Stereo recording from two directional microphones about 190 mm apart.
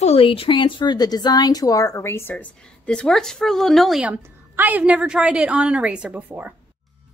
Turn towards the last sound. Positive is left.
turn(degrees=-10)  # may be behind; listen again after turning